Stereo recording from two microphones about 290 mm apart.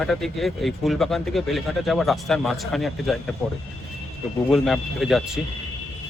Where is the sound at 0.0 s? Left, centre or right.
Centre.